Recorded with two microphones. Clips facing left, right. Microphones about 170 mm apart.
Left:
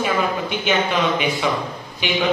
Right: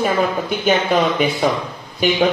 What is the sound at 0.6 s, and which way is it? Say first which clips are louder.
A woman's voice: right 4 dB; 40° right (ahead or behind).